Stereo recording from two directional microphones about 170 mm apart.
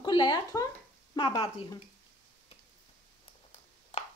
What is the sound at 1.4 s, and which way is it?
Speech, 35° left (ahead or behind).